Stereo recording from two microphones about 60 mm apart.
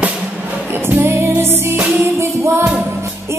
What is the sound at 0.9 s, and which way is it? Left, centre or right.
Music, right.